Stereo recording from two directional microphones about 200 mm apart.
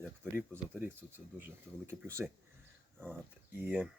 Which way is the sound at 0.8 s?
10° right (ahead or behind).